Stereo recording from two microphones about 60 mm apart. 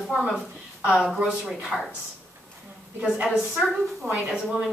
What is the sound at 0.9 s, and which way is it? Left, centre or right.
Speech, centre.